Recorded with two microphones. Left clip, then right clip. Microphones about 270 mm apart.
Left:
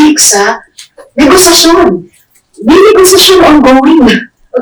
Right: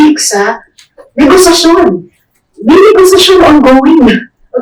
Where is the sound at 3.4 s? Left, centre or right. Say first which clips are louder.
Even; right.